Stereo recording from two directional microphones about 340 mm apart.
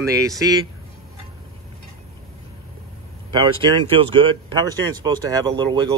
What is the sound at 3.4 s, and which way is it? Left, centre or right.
Speech, centre.